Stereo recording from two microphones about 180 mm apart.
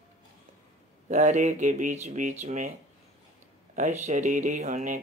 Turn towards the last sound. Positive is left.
turn(degrees=-45)  # may be behind; listen again after turning